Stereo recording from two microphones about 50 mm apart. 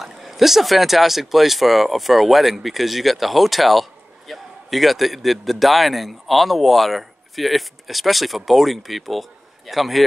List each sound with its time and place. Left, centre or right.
0.0 s speech: centre